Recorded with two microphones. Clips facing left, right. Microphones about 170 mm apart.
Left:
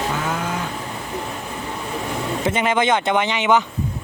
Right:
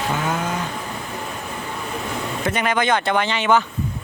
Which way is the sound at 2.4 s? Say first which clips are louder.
Left 2 dB; 20° left (ahead or behind).